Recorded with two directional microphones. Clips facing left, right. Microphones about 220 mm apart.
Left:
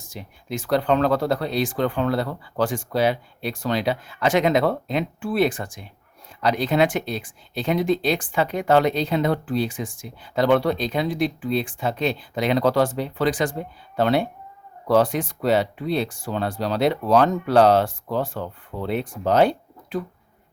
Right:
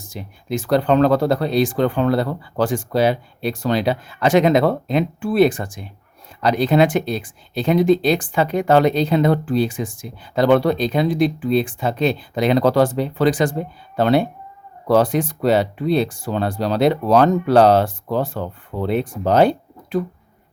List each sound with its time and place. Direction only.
0.1 s speech: 40° right (ahead or behind)